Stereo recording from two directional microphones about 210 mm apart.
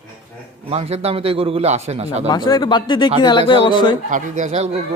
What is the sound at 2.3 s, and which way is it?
Speech, 20° left (ahead or behind).